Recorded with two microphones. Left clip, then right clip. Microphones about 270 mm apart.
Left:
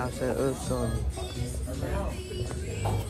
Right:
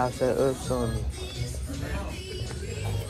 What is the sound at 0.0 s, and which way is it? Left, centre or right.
Speech, centre.